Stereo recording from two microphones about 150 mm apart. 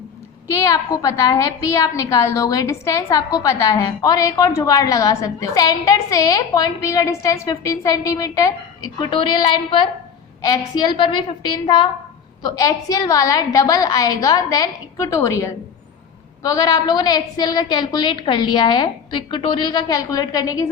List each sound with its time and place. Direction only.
0.5 s a woman's voice: 20° left (ahead or behind)